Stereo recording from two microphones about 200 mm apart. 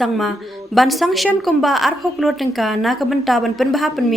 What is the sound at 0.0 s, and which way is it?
A woman's voice, centre (ahead or behind).